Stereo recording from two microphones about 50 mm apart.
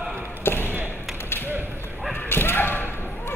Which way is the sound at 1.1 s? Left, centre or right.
Left.